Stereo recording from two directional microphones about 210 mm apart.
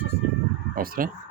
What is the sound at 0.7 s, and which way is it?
Speech, 40° right (ahead or behind).